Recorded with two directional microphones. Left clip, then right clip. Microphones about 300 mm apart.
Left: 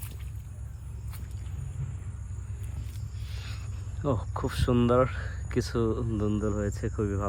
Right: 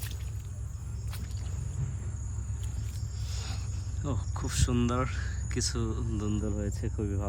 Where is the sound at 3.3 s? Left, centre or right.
Centre.